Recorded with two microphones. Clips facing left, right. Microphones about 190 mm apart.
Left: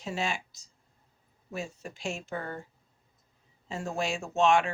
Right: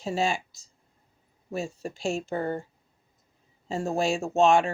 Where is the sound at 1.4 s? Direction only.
40° right (ahead or behind).